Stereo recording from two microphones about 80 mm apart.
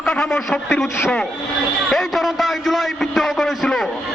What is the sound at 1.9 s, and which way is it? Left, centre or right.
A man's voice, centre.